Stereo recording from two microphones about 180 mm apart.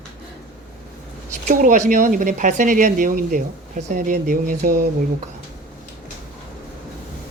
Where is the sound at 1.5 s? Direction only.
45° right (ahead or behind).